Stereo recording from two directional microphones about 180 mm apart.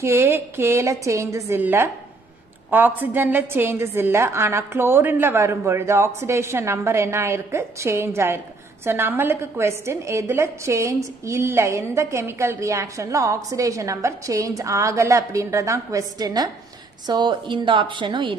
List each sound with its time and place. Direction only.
0.0 s a woman's voice: 15° right (ahead or behind)